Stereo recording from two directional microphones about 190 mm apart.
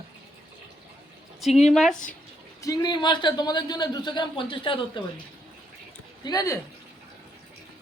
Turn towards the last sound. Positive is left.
turn(degrees=20)  # may be behind; listen again after turning